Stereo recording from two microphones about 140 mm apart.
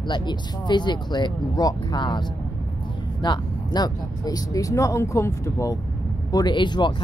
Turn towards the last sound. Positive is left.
turn(degrees=35)  # may be behind; listen again after turning